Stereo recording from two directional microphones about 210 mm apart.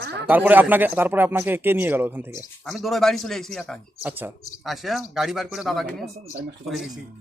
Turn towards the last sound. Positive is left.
turn(degrees=0)  # may be behind; listen again after turning